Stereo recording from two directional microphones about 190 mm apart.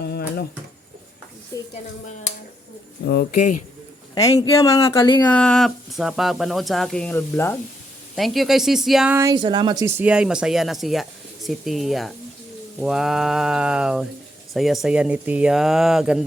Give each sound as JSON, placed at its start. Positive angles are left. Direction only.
{"t": 0.0, "sound": "a sound", "side_deg": 55}
{"t": 3.0, "sound": "speech", "side_deg": 60}
{"t": 4.1, "sound": "speech", "side_deg": 20}
{"t": 5.3, "sound": "speech", "side_deg": 5}
{"t": 8.1, "sound": "speech", "side_deg": 0}
{"t": 9.1, "sound": "speech", "side_deg": -20}
{"t": 10.0, "sound": "speech", "side_deg": -5}